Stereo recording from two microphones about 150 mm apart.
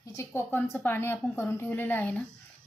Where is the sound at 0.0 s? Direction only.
20° left (ahead or behind).